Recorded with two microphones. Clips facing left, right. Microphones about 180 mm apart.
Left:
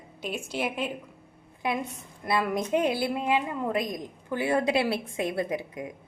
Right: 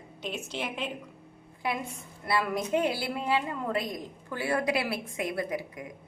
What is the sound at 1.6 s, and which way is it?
A woman's voice, 20° left (ahead or behind).